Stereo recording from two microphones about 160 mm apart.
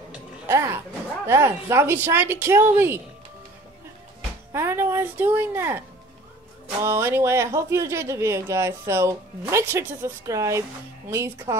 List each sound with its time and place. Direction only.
0.1 s speech: 15° right (ahead or behind)
4.5 s speech: 15° right (ahead or behind)